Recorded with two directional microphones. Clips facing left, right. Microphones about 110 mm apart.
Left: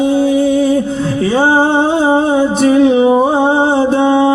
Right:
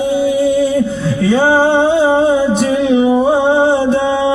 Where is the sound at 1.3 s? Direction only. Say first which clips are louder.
Right 1 dB; 30° left (ahead or behind).